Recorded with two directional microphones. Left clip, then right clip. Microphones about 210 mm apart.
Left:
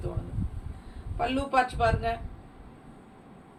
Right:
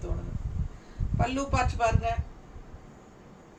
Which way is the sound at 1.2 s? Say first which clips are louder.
Left 3 dB; 15° right (ahead or behind).